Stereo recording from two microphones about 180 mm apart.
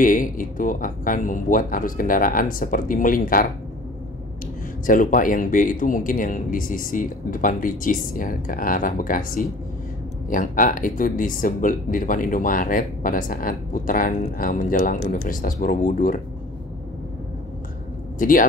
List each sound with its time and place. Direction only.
0.0 s speech: 50° left (ahead or behind)
4.8 s speech: 50° left (ahead or behind)
18.2 s speech: 50° left (ahead or behind)